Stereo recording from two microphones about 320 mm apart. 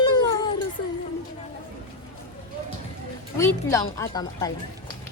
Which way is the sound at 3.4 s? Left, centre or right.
Centre.